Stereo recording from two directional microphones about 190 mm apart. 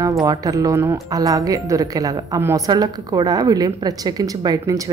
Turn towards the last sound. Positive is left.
turn(degrees=-15)  # may be behind; listen again after turning